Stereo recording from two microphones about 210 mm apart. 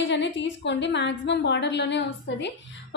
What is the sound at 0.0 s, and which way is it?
A woman's voice, 55° left (ahead or behind).